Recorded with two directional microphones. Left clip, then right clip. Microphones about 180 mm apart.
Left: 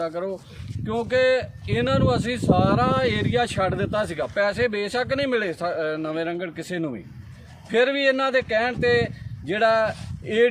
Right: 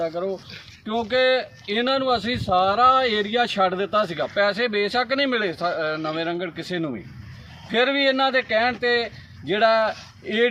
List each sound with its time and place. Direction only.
0.2 s speech: 15° left (ahead or behind)
0.9 s speech: 35° left (ahead or behind)